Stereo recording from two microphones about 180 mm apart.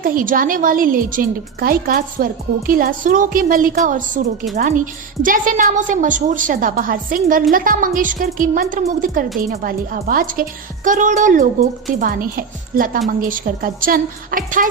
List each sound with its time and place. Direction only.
0.0 s a woman's voice: 50° right (ahead or behind)
5.2 s a woman's voice: 50° right (ahead or behind)